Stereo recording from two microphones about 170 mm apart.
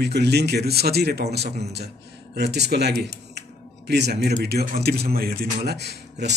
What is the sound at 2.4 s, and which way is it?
Speech, 80° right.